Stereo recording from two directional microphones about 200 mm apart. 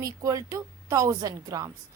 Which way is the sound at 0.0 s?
15° right (ahead or behind).